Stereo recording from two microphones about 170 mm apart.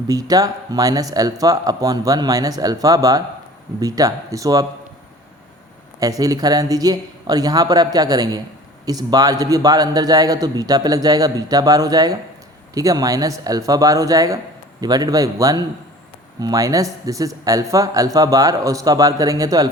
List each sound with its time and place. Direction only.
0.1 s a man's voice: 20° right (ahead or behind)
6.0 s a man's voice: 20° right (ahead or behind)